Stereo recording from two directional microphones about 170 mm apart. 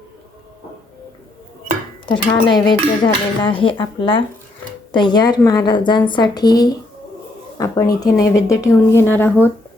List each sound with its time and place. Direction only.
2.0 s dishes: 25° left (ahead or behind)
8.2 s speech: 20° left (ahead or behind)